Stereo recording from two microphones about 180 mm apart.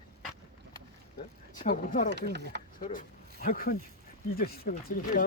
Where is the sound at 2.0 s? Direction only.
70° right (ahead or behind).